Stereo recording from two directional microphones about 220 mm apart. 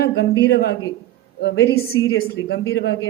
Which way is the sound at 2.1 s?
60° left (ahead or behind).